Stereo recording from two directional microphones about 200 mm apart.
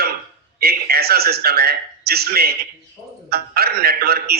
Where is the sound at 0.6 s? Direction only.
50° right (ahead or behind).